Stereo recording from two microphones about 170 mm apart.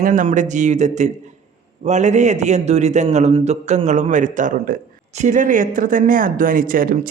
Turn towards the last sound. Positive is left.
turn(degrees=-55)  # may be behind; listen again after turning